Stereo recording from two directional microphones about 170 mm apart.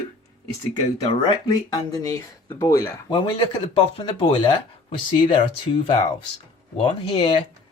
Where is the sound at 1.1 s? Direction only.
30° left (ahead or behind).